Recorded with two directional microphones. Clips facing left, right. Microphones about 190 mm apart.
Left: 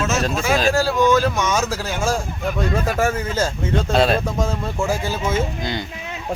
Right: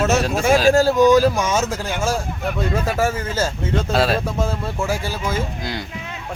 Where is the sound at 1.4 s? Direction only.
30° right (ahead or behind).